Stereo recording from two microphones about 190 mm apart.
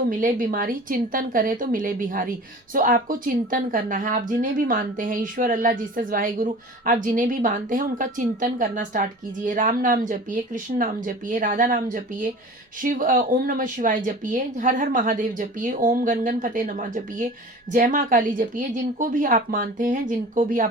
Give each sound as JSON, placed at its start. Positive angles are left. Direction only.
{"t": 0.1, "sound": "a woman's voice", "side_deg": -45}